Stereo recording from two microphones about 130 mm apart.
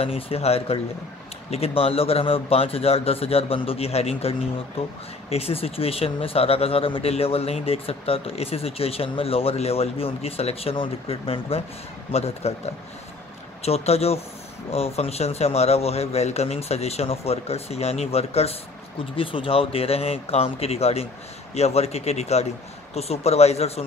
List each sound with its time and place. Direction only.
0.0 s speech: 50° left (ahead or behind)
13.6 s a man's voice: 55° left (ahead or behind)